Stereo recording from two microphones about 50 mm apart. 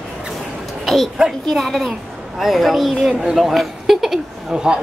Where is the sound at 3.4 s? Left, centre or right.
Centre.